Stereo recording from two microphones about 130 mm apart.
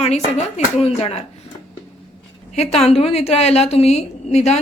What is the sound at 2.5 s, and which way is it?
A woman's voice, 55° left (ahead or behind).